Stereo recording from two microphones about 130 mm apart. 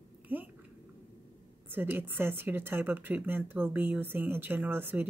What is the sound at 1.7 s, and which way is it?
A woman's voice, 15° right (ahead or behind).